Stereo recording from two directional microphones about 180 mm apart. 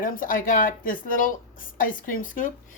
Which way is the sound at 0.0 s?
50° left (ahead or behind).